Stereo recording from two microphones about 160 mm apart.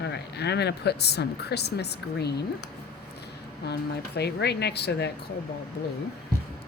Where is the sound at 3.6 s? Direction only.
90° left.